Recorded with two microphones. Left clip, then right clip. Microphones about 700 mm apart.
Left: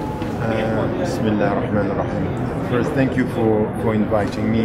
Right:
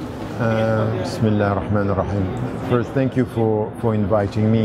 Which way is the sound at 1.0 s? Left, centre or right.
Right.